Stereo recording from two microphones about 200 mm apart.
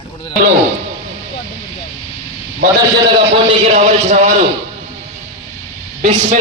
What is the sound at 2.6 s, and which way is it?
Speech, 45° right (ahead or behind).